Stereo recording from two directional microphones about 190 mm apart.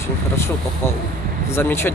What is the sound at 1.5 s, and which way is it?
Speech, 10° left (ahead or behind).